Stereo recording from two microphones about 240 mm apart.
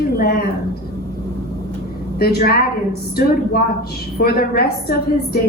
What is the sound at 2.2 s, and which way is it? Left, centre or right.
Speech, left.